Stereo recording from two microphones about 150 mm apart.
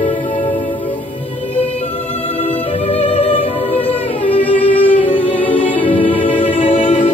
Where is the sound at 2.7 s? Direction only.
40° left (ahead or behind).